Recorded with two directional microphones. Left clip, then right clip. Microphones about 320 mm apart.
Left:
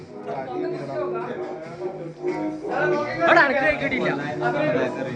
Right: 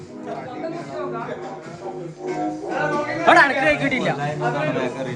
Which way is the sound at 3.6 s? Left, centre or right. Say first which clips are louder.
Right 2 dB; centre.